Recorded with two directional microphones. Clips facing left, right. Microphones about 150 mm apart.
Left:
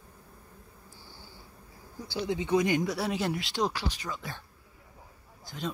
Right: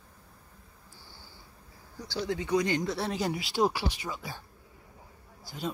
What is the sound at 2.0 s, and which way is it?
Speech, 15° left (ahead or behind).